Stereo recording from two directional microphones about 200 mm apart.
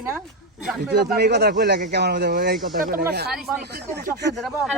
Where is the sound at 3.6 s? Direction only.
55° right (ahead or behind).